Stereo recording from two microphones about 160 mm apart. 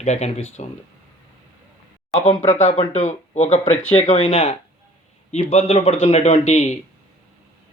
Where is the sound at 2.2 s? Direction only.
40° left (ahead or behind).